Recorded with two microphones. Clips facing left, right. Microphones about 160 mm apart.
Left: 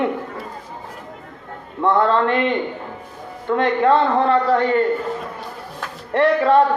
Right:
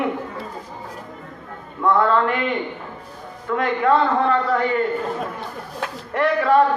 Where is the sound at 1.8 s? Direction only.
30° left (ahead or behind).